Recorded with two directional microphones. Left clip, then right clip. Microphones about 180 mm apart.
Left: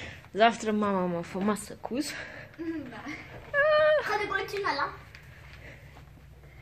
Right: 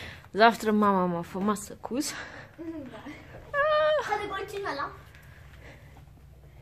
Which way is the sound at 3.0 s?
10° right (ahead or behind).